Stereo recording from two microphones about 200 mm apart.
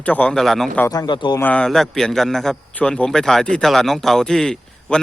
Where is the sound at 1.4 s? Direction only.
5° left (ahead or behind).